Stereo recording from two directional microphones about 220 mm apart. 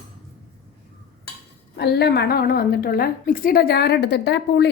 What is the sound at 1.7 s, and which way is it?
A woman's voice, 50° left (ahead or behind).